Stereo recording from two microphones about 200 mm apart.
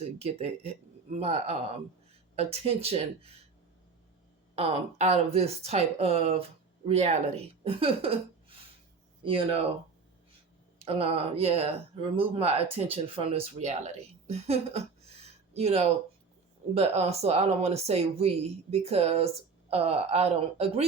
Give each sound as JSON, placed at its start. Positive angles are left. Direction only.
{"t": 0.0, "sound": "speech", "side_deg": -30}
{"t": 4.5, "sound": "speech", "side_deg": -30}
{"t": 10.8, "sound": "a woman's voice", "side_deg": -30}